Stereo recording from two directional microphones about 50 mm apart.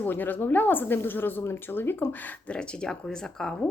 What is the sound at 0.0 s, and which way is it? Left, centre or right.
Speech, left.